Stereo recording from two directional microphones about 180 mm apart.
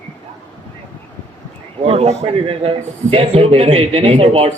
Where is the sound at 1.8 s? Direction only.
35° right (ahead or behind).